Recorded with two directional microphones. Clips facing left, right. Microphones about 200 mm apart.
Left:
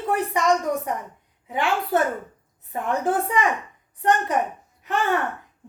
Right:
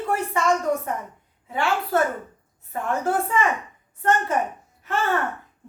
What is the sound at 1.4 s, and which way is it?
Speech, 15° left (ahead or behind).